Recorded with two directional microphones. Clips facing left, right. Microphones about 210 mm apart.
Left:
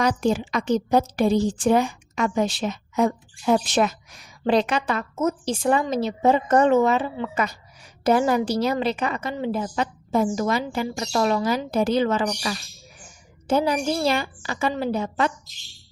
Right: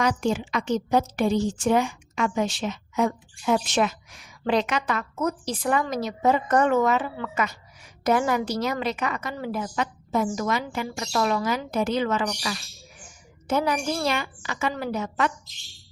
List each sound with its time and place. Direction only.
0.0 s a woman's voice: 35° left (ahead or behind)